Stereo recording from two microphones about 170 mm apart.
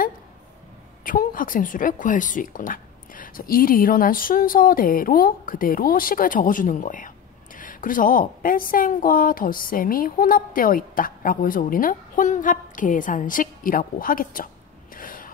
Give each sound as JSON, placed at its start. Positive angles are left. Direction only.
{"t": 1.0, "sound": "a woman's voice", "side_deg": 55}
{"t": 15.0, "sound": "gasp", "side_deg": 55}